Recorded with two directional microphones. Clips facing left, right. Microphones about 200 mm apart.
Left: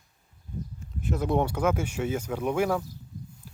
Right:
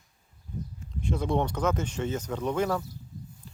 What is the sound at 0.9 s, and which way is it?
Speech, 5° left (ahead or behind).